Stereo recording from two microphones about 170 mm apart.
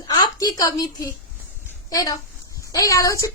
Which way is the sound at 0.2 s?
20° left (ahead or behind).